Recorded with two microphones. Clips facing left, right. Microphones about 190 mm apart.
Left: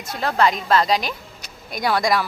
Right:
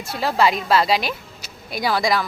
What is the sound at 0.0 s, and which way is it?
A woman's voice, 5° right (ahead or behind).